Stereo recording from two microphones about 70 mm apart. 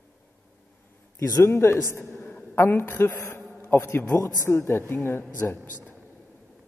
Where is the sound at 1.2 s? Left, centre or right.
Left.